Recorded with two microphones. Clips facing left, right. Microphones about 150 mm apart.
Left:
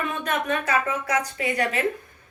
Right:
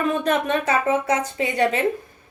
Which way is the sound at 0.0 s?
30° right (ahead or behind).